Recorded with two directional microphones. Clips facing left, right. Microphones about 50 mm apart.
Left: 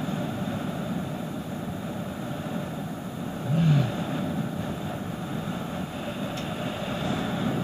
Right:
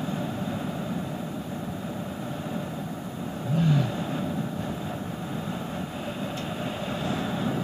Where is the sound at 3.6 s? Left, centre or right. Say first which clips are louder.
Even; centre.